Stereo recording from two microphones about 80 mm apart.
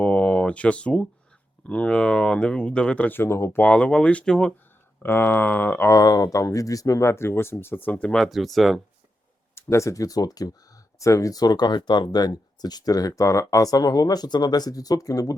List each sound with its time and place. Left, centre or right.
0.0 s a sound: centre
1.6 s speech: centre
3.1 s speech: left
3.6 s speech: centre
5.0 s a sound: left
5.9 s speech: left
7.6 s a sound: left
8.1 s speech: centre
9.6 s speech: left